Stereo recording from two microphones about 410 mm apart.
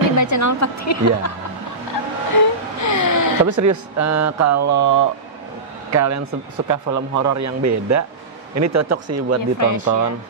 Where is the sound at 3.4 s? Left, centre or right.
Right.